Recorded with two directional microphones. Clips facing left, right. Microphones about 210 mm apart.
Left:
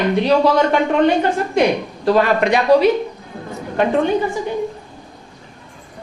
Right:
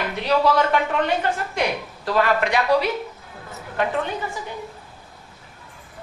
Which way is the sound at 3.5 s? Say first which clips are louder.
Left 7 dB; 25° left (ahead or behind).